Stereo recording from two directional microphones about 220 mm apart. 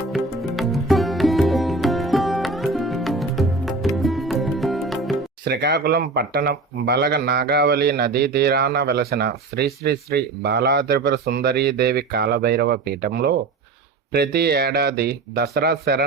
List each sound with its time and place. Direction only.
0.1 s music: centre (ahead or behind)
5.5 s speech: 45° right (ahead or behind)